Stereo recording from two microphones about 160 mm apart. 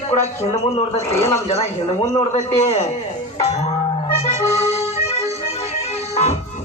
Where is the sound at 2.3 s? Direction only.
40° left (ahead or behind).